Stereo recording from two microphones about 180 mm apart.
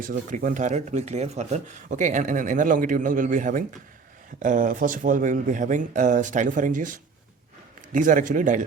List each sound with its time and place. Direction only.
0.0 s a man's voice: 50° right (ahead or behind)